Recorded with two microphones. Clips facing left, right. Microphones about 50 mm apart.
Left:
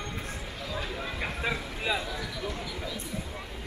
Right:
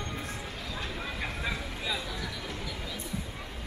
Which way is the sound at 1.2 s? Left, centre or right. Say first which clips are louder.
Left 4 dB; centre.